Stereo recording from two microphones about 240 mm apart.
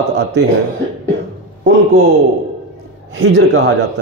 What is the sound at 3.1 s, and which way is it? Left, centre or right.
Speech, right.